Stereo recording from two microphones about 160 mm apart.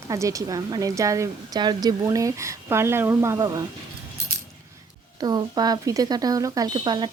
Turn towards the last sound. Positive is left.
turn(degrees=-30)  # may be behind; listen again after turning